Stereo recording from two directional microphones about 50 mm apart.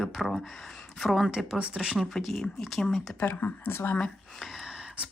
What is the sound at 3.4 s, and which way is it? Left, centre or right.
Speech, left.